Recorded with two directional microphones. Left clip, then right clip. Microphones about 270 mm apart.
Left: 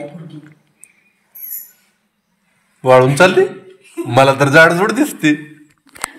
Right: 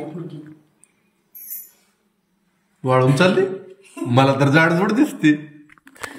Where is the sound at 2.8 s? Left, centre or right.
Centre.